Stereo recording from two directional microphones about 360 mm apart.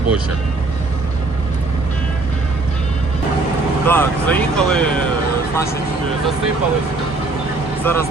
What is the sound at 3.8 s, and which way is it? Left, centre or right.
Speech, centre.